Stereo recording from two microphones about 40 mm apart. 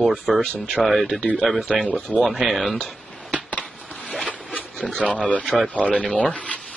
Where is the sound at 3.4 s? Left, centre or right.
Left.